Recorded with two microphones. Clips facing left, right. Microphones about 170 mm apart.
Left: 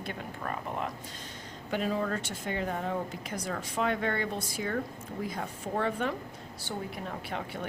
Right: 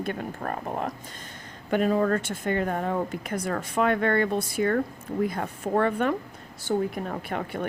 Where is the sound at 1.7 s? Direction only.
55° right (ahead or behind).